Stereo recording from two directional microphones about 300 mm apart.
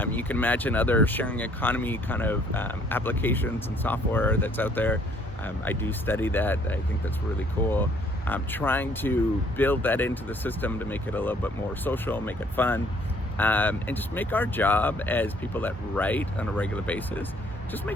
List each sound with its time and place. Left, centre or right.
0.0 s speech: centre